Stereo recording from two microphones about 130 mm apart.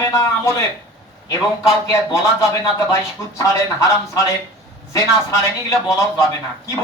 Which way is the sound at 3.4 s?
25° left (ahead or behind).